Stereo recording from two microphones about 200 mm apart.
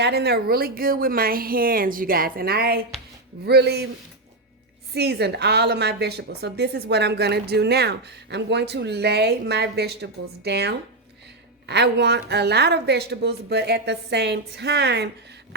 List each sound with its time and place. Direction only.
0.0 s a woman's voice: 55° right (ahead or behind)
4.9 s a woman's voice: 55° right (ahead or behind)